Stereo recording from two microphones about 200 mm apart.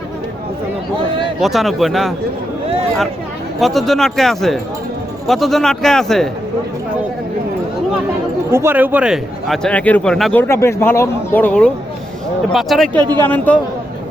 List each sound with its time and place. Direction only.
1.4 s speech: centre (ahead or behind)
3.6 s speech: centre (ahead or behind)
8.4 s speech: 10° right (ahead or behind)
10.5 s speech: 15° left (ahead or behind)